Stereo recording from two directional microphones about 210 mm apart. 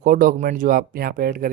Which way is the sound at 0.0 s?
40° right (ahead or behind).